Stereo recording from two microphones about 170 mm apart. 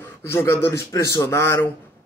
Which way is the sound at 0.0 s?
15° left (ahead or behind).